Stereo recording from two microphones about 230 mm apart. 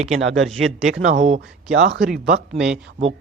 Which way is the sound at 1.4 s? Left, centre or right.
Right.